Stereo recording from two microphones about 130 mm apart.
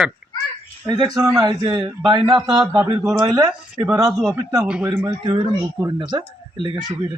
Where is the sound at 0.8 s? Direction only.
30° right (ahead or behind).